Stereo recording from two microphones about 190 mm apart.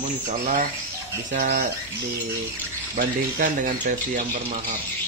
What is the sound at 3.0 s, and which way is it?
Speech, 45° right (ahead or behind).